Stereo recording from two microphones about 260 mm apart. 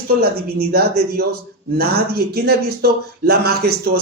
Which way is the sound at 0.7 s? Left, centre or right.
Right.